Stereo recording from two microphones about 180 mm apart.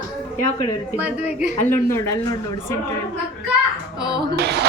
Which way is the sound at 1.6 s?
10° left (ahead or behind).